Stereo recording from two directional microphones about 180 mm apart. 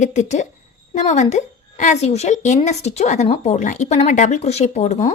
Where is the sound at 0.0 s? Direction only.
40° left (ahead or behind).